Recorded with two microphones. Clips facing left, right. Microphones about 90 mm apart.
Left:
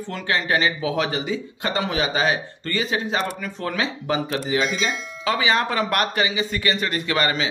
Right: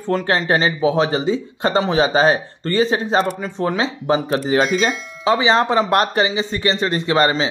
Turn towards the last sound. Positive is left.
turn(degrees=-30)  # may be behind; listen again after turning